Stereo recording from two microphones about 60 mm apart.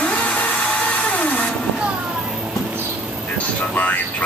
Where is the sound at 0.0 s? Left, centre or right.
Left.